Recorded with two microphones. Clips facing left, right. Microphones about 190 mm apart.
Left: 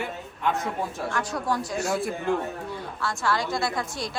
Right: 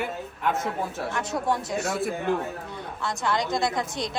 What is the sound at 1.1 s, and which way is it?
Speech, 25° right (ahead or behind).